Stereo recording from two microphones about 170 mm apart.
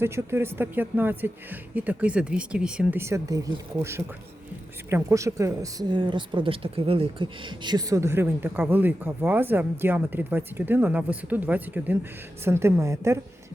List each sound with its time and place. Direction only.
0.0 s speech: 15° right (ahead or behind)